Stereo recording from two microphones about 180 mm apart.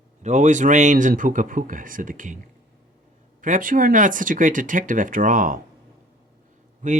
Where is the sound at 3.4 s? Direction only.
50° right (ahead or behind).